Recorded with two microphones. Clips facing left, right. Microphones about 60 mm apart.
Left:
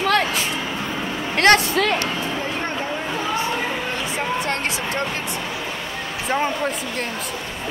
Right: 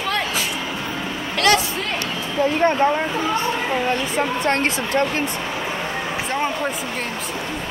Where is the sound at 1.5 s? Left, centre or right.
Left.